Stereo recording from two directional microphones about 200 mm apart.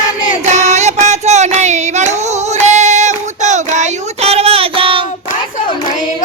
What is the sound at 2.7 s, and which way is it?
Child singing, 35° right (ahead or behind).